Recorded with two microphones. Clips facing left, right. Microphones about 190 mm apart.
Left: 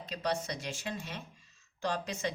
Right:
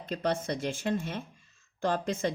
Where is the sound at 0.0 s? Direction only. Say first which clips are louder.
Right 4 dB; 50° right (ahead or behind).